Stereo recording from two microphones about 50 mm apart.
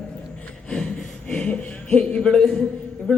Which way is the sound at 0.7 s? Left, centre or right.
Centre.